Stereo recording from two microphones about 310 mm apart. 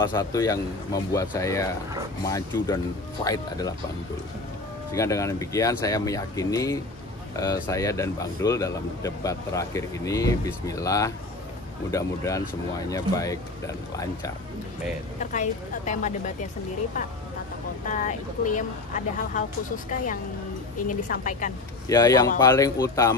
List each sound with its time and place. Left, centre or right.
0.0 s speech: centre
4.9 s speech: centre
15.3 s speech: left
17.8 s speech: left
21.1 s speech: left
21.8 s speech: centre